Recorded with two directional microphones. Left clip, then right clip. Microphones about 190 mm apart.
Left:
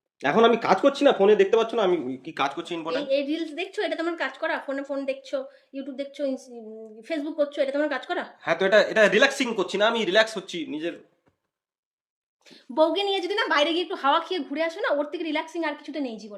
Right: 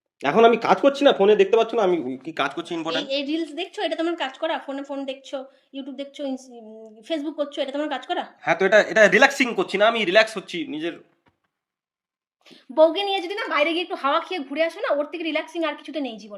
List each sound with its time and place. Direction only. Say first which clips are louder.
0.2 s speech: right 3 dB; 20° right (ahead or behind)
3.0 s a woman's voice: even; 10° left (ahead or behind)
8.4 s speech: right 2 dB; 10° right (ahead or behind)
9.0 s a woman's voice: right 4 dB; 25° right (ahead or behind); by 11.0 s centre (ahead or behind)
12.5 s a woman's voice: right 5 dB; 5° left (ahead or behind)